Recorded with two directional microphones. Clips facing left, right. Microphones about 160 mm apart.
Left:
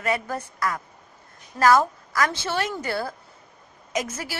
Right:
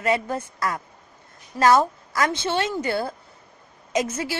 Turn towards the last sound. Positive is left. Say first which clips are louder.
# right 4 dB
turn(degrees=-25)  # may be behind; listen again after turning